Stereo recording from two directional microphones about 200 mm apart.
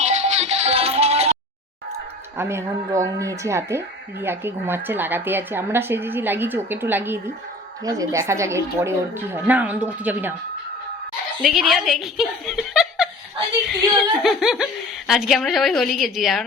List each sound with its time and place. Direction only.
0.0 s music: 35° right (ahead or behind)
2.4 s speech: 15° right (ahead or behind)
11.4 s speech: centre (ahead or behind)